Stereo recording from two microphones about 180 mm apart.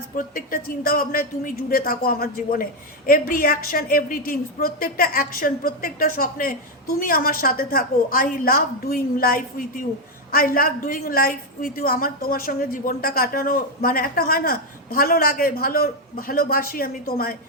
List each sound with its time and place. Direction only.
0.2 s a woman's voice: 55° left (ahead or behind)